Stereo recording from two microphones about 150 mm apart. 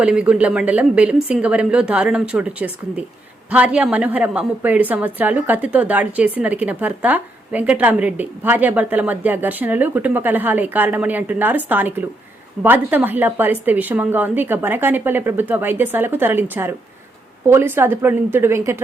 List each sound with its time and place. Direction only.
0.0 s a woman's voice: 5° right (ahead or behind)